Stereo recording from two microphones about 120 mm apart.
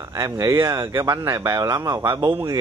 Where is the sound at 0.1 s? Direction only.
30° right (ahead or behind).